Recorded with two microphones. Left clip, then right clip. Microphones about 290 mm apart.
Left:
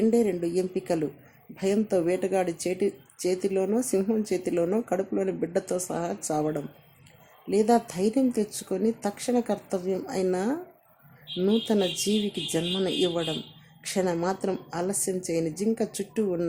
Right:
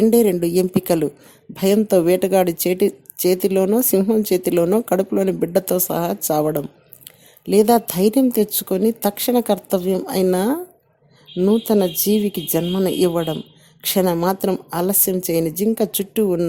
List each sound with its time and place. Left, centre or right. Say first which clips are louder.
0.0 s a woman's voice: right 9 dB; right